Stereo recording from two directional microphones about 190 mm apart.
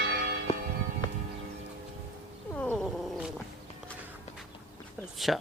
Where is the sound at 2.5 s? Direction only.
5° left (ahead or behind).